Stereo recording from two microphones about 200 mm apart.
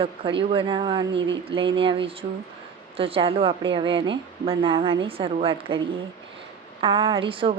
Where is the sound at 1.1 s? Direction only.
65° right (ahead or behind).